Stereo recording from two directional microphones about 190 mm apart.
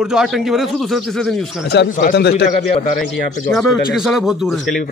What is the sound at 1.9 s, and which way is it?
Speech, 45° left (ahead or behind).